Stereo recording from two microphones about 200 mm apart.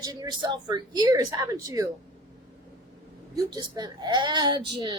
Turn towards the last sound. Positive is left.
turn(degrees=-20)  # may be behind; listen again after turning